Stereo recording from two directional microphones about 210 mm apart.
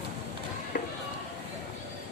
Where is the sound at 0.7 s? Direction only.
40° left (ahead or behind).